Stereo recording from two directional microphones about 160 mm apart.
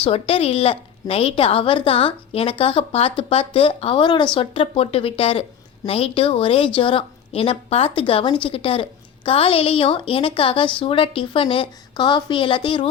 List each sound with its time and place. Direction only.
0.0 s a woman's voice: 35° left (ahead or behind)